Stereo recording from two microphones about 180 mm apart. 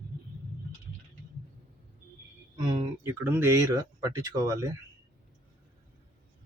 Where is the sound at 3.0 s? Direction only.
10° right (ahead or behind).